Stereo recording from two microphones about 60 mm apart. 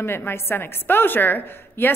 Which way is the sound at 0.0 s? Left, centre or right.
Left.